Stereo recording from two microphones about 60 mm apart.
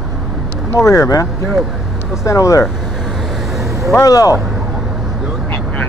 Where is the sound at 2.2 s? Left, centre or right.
Left.